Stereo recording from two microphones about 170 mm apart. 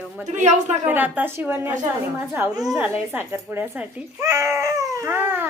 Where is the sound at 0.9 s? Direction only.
10° right (ahead or behind).